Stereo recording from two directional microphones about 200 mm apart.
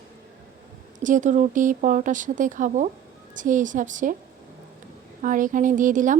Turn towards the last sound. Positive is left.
turn(degrees=-40)  # may be behind; listen again after turning